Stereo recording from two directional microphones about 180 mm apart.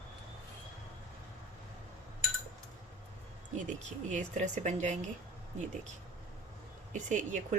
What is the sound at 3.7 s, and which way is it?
Speech, 40° right (ahead or behind).